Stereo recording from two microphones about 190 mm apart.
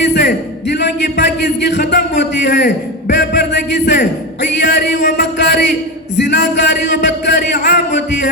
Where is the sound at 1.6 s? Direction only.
65° left (ahead or behind).